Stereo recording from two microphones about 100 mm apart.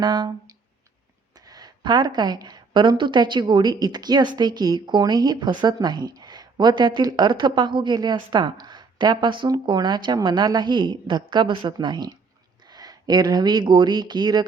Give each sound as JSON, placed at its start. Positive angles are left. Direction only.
{"t": 0.0, "sound": "speech", "side_deg": -45}